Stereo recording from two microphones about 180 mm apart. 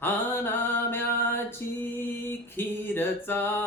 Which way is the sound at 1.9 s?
10° left (ahead or behind).